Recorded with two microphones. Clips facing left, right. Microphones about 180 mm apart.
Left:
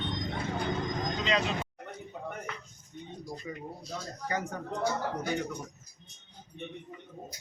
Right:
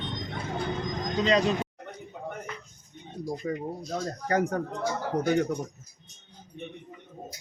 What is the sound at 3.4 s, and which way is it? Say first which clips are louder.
Speech: right 8 dB; 55° right (ahead or behind).